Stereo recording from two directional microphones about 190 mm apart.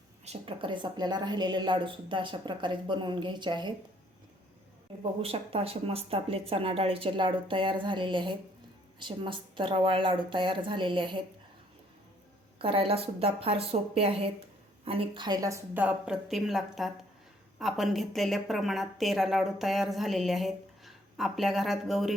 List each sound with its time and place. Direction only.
0.3 s a woman's voice: 25° right (ahead or behind)
5.2 s a woman's voice: 30° right (ahead or behind)
12.5 s a woman's voice: 30° right (ahead or behind); by 22.1 s centre (ahead or behind)